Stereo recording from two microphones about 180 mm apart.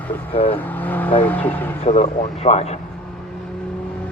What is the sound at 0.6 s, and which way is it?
Speech, 10° left (ahead or behind).